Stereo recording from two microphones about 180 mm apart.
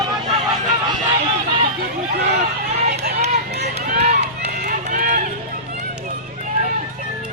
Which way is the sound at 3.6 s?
55° right (ahead or behind).